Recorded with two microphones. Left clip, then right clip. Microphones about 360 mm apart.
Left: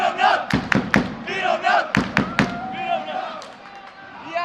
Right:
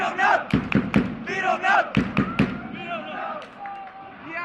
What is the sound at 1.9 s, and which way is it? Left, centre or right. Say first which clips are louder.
Thump: left 5 dB; left.